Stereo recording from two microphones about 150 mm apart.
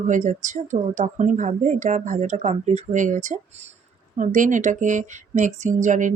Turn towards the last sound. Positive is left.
turn(degrees=-55)  # may be behind; listen again after turning